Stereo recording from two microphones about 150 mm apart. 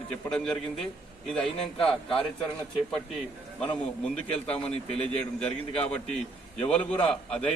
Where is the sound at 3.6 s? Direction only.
5° left (ahead or behind).